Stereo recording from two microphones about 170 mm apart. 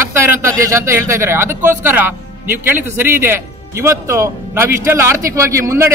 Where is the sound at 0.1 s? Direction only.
15° right (ahead or behind).